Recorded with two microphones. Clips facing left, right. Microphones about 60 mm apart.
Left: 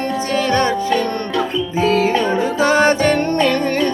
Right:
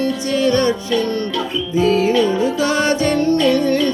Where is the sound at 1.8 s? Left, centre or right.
Left.